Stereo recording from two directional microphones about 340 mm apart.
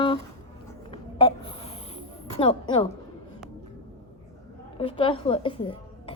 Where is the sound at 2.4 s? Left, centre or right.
Centre.